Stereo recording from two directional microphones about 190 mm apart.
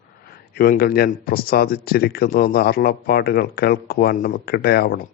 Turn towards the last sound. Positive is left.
turn(degrees=55)  # may be behind; listen again after turning